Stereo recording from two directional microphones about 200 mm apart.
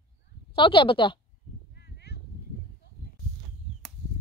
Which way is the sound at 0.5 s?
25° left (ahead or behind).